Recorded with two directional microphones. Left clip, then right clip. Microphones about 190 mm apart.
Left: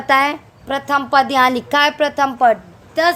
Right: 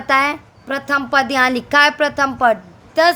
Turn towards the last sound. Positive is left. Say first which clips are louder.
# right 2 dB
turn(degrees=-5)  # may be behind; listen again after turning